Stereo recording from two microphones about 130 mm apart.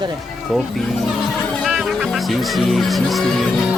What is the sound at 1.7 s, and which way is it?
Speech, 5° right (ahead or behind).